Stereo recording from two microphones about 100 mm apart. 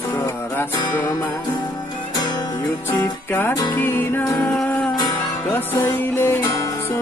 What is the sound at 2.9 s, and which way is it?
Music, 25° left (ahead or behind).